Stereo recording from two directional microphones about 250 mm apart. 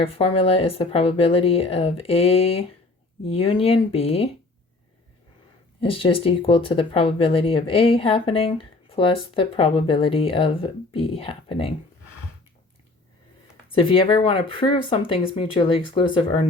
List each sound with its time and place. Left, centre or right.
0.0 s speech: left
5.8 s speech: left
13.7 s speech: left